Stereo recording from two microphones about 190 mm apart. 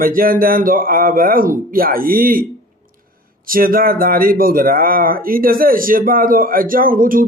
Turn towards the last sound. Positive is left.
turn(degrees=-45)  # may be behind; listen again after turning